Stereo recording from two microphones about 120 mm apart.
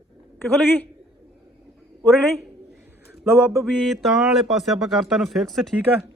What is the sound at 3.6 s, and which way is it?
Speech, centre (ahead or behind).